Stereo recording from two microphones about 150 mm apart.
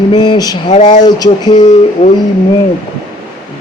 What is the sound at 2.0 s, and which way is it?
Mantra, 40° left (ahead or behind).